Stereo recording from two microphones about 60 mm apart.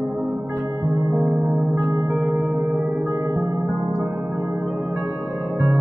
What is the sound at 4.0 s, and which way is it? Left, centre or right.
Music, centre.